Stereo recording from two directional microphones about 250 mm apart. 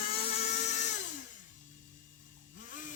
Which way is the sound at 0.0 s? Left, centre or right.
Left.